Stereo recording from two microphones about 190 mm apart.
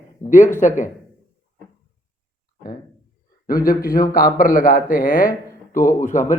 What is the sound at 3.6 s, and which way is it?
A man's voice, 50° left (ahead or behind).